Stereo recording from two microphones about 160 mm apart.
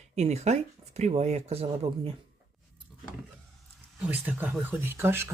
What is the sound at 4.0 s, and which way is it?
Speech, 10° right (ahead or behind).